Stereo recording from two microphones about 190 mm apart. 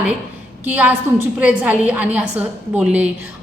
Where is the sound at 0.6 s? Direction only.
10° right (ahead or behind).